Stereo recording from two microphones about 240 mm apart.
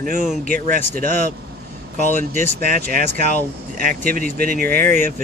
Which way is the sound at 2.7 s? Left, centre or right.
Right.